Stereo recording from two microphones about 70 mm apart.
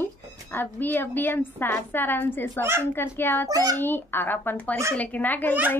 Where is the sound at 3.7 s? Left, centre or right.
Left.